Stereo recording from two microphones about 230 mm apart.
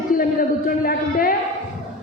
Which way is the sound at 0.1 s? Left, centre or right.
Left.